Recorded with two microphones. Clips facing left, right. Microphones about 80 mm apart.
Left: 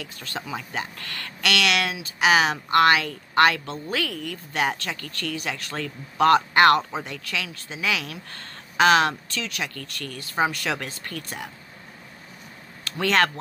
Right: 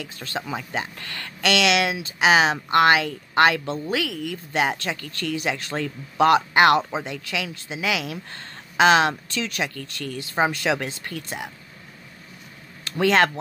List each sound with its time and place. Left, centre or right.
0.0 s speech: right
3.9 s speech: centre
4.5 s speech: right
9.4 s speech: right
9.8 s speech: right
12.8 s speech: centre